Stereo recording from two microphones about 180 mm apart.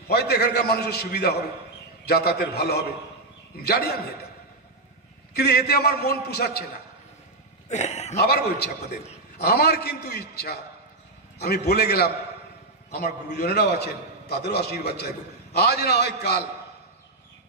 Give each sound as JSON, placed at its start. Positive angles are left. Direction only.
{"t": 0.1, "sound": "a man's voice", "side_deg": 65}
{"t": 5.3, "sound": "a man's voice", "side_deg": 60}
{"t": 7.7, "sound": "a man's voice", "side_deg": 40}
{"t": 8.2, "sound": "a man's voice", "side_deg": 65}